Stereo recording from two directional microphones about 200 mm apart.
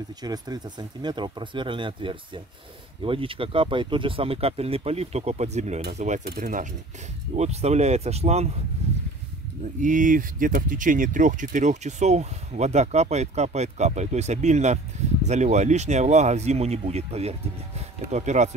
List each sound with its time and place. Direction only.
0.2 s speech: 20° right (ahead or behind)
9.8 s speech: 40° right (ahead or behind)